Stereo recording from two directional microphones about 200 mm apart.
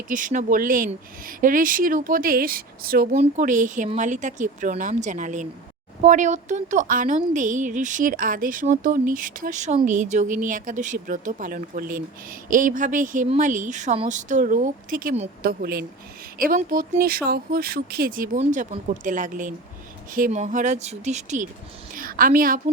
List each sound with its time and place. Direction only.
0.1 s speech: 40° right (ahead or behind)
3.2 s a woman's voice: 40° right (ahead or behind)
15.4 s a woman's voice: 50° right (ahead or behind)